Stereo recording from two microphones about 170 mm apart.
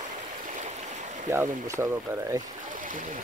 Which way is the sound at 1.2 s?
15° right (ahead or behind).